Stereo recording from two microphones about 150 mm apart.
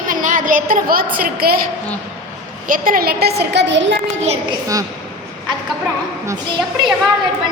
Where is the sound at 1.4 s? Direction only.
85° right.